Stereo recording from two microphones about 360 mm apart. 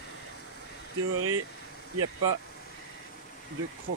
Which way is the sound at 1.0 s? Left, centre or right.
Right.